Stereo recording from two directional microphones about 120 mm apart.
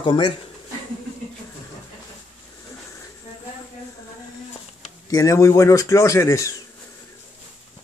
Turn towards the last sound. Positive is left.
turn(degrees=25)  # may be behind; listen again after turning